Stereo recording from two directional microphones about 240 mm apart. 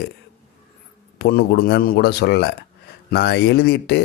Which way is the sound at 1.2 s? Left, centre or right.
Left.